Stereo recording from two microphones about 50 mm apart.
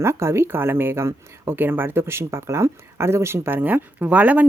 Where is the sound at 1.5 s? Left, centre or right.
Right.